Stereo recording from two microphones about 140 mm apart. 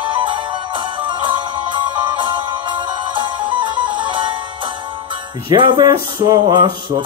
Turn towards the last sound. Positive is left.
turn(degrees=-30)  # may be behind; listen again after turning